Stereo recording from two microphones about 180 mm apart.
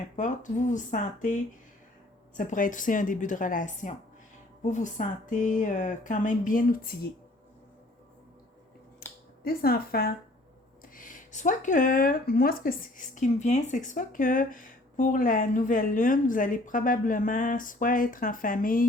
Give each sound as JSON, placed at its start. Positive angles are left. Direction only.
{"t": 0.2, "sound": "speech", "side_deg": 45}
{"t": 9.0, "sound": "finger snapping", "side_deg": 55}
{"t": 10.9, "sound": "speech", "side_deg": 50}